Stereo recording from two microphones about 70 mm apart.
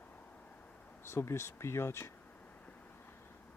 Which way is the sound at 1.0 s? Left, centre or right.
Left.